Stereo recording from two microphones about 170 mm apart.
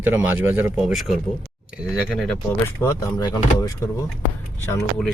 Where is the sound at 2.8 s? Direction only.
20° left (ahead or behind).